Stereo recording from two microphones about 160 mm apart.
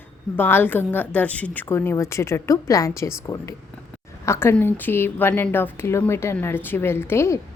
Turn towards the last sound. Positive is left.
turn(degrees=15)  # may be behind; listen again after turning